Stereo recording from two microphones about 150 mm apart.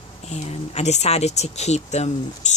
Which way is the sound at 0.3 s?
45° left (ahead or behind).